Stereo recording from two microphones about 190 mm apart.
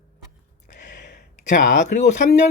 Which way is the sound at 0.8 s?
65° left (ahead or behind).